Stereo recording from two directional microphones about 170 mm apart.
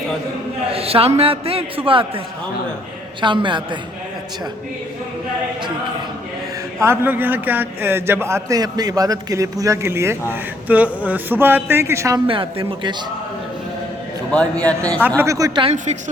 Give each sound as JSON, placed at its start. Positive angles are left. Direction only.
{"t": 0.7, "sound": "a man's voice", "side_deg": -35}
{"t": 6.8, "sound": "a man's voice", "side_deg": -10}
{"t": 12.3, "sound": "a man's voice", "side_deg": -30}
{"t": 14.6, "sound": "a man's voice", "side_deg": 5}
{"t": 15.2, "sound": "a man's voice", "side_deg": -20}